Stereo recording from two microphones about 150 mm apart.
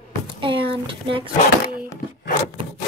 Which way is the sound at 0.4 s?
35° right (ahead or behind).